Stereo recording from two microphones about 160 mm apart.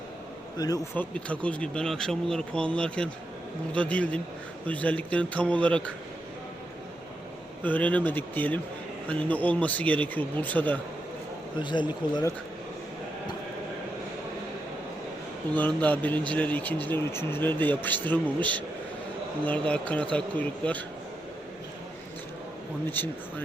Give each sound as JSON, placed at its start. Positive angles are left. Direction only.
{"t": 0.6, "sound": "speech", "side_deg": 25}
{"t": 0.9, "sound": "speech", "side_deg": 10}
{"t": 7.6, "sound": "speech", "side_deg": 10}
{"t": 11.6, "sound": "speech", "side_deg": 30}
{"t": 15.5, "sound": "speech", "side_deg": 10}